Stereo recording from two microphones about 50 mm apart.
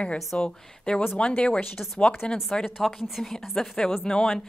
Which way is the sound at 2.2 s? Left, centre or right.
Left.